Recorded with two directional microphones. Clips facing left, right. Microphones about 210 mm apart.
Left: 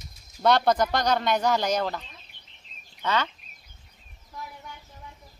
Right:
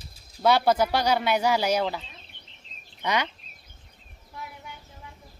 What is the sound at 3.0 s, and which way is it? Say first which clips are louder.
Speech: even; 15° right (ahead or behind).